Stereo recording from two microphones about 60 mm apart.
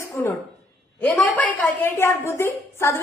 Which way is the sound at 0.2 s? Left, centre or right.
Left.